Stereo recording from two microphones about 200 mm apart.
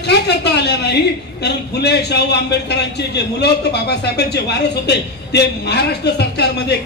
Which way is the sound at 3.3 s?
55° left (ahead or behind).